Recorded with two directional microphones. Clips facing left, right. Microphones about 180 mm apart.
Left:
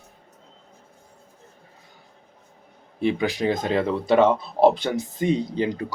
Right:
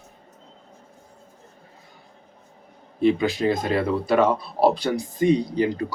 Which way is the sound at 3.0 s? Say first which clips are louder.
Right 3 dB; 15° left (ahead or behind).